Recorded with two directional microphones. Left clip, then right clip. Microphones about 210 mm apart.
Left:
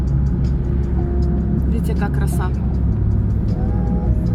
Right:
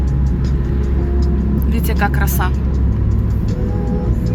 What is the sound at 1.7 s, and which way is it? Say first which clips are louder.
Speech: right 5 dB; 10° right (ahead or behind).